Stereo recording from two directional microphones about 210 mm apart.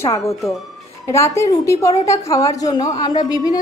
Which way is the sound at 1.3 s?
15° left (ahead or behind).